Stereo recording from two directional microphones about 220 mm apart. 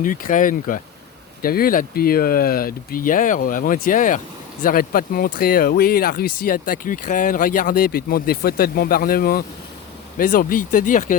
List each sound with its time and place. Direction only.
0.0 s speech: 40° left (ahead or behind)